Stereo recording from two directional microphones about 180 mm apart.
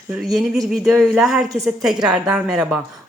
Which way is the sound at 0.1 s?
Centre (ahead or behind).